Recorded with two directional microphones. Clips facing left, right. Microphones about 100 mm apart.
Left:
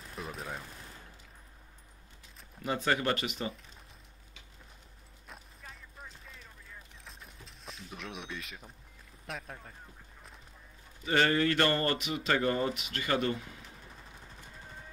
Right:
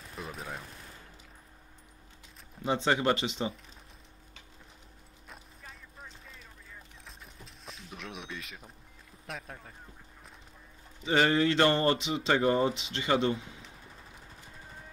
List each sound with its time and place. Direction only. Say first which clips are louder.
0.1 s gunshot: even; centre (ahead or behind)
2.6 s speech: right 3 dB; 20° right (ahead or behind)
5.3 s music: even; centre (ahead or behind)
9.2 s speech: even; centre (ahead or behind)
11.1 s speech: right 2 dB; 15° right (ahead or behind)